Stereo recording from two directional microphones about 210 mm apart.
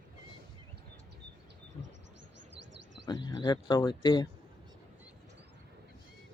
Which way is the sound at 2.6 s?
60° right (ahead or behind).